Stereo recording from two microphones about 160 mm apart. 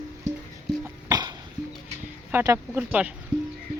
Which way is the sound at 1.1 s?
25° right (ahead or behind).